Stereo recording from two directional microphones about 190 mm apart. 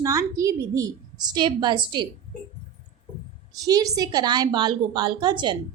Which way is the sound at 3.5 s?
20° right (ahead or behind).